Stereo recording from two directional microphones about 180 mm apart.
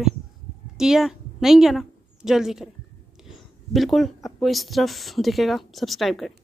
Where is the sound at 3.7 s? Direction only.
Centre (ahead or behind).